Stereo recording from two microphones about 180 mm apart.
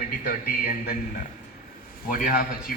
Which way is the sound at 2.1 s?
50° left (ahead or behind).